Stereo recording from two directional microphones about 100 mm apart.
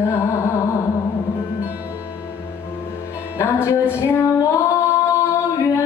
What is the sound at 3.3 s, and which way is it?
Music, 25° left (ahead or behind).